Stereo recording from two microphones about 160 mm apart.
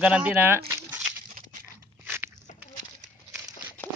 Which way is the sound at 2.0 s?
15° right (ahead or behind).